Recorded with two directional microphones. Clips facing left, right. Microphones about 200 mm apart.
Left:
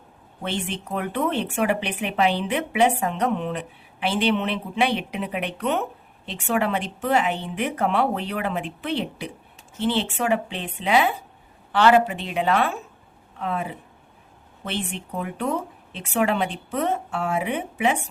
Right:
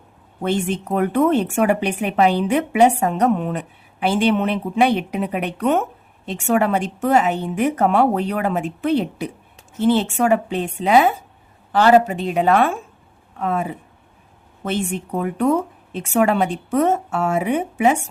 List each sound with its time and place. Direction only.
0.4 s a woman's voice: 45° right (ahead or behind)